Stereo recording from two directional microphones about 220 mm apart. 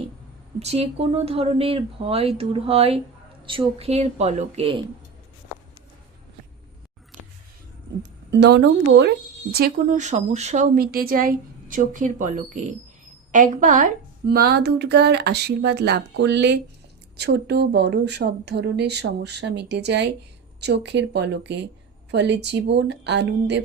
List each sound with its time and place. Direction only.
0.6 s speech: 30° right (ahead or behind)
8.3 s a woman's voice: 50° right (ahead or behind)